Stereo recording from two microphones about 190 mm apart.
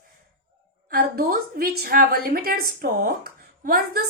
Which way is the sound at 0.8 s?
50° right (ahead or behind).